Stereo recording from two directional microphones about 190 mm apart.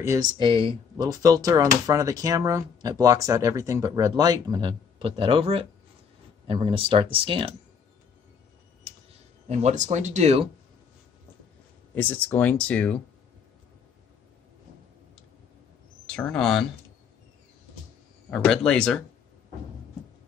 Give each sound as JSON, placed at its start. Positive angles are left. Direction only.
{"t": 0.0, "sound": "speech", "side_deg": -20}
{"t": 9.5, "sound": "speech", "side_deg": -35}
{"t": 11.9, "sound": "speech", "side_deg": 10}
{"t": 16.1, "sound": "speech", "side_deg": 5}
{"t": 18.3, "sound": "speech", "side_deg": 5}